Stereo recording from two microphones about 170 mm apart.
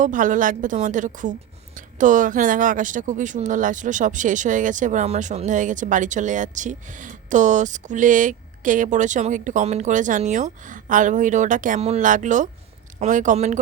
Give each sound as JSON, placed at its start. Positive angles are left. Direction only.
{"t": 0.0, "sound": "a woman's voice", "side_deg": -50}